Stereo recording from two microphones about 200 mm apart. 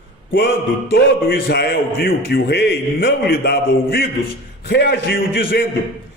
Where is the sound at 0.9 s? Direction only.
50° left (ahead or behind).